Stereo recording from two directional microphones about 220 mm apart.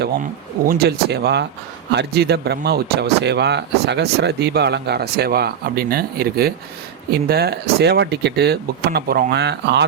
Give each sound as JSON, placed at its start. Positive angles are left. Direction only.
{"t": 0.7, "sound": "speech", "side_deg": -45}